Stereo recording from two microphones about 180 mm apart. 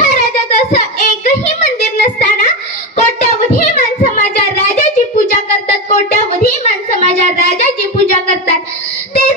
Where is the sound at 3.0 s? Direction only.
40° left (ahead or behind).